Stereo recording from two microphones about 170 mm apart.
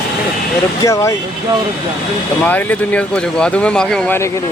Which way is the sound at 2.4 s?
10° left (ahead or behind).